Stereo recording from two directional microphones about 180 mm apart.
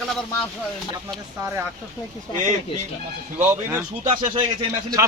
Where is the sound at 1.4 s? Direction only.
15° right (ahead or behind).